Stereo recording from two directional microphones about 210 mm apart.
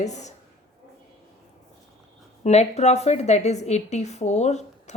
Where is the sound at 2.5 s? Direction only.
30° left (ahead or behind).